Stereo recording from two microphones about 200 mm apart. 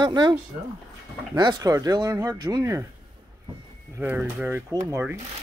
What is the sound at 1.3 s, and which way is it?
Speech, 20° right (ahead or behind).